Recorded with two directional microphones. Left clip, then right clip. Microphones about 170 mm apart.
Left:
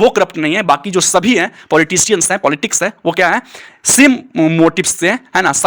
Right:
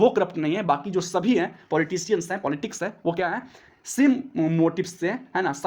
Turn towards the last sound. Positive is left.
turn(degrees=30)  # may be behind; listen again after turning